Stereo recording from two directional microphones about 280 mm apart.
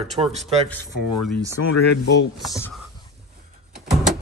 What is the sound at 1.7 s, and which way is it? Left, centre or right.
Speech, left.